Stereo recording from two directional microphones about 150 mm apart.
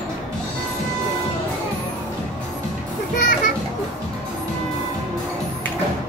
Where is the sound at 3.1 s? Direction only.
60° left (ahead or behind).